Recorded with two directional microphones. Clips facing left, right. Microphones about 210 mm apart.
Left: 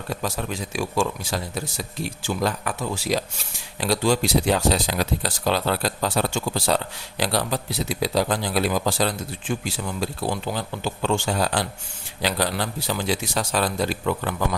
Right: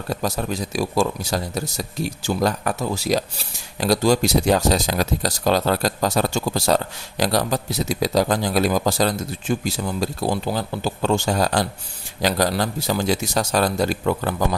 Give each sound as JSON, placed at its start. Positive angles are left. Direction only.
{"t": 0.1, "sound": "a man's voice", "side_deg": -40}